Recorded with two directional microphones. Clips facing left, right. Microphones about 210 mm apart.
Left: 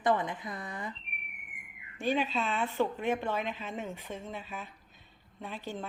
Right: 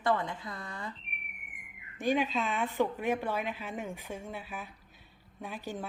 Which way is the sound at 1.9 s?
15° right (ahead or behind).